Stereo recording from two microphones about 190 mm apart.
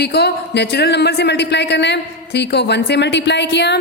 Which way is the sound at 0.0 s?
60° left (ahead or behind).